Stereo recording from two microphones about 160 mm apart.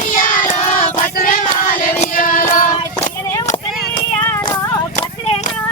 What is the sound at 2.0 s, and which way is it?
Music, 60° left (ahead or behind).